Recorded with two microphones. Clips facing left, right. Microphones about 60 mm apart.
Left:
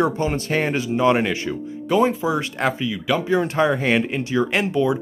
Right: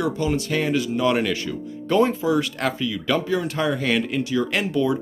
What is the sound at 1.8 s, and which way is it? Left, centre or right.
Speech, centre.